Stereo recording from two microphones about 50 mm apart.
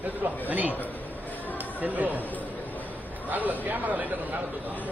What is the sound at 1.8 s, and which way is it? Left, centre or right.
Speech, right.